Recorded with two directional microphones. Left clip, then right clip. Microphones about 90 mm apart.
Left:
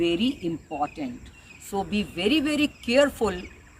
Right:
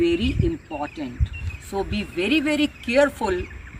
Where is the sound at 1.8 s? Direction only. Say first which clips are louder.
Right 1 dB; 35° left (ahead or behind).